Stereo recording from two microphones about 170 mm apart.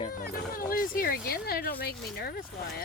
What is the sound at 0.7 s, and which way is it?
Speech, 55° left (ahead or behind).